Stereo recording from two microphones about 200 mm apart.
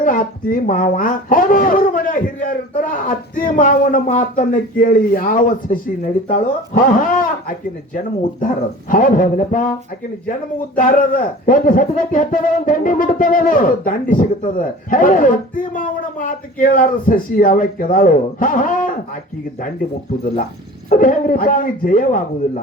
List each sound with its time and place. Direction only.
0.0 s speech: 45° left (ahead or behind)
10.8 s speech: 40° left (ahead or behind)
20.9 s speech: 45° left (ahead or behind)